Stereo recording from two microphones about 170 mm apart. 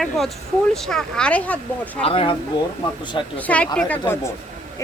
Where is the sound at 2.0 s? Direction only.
35° left (ahead or behind).